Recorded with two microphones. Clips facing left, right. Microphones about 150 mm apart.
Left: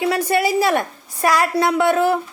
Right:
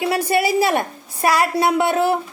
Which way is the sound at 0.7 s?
30° right (ahead or behind).